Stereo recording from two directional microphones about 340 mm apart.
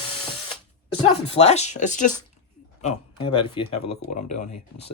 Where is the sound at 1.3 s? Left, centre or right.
Centre.